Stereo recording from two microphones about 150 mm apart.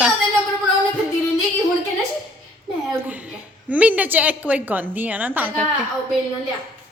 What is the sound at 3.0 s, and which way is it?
A woman's voice, 10° right (ahead or behind).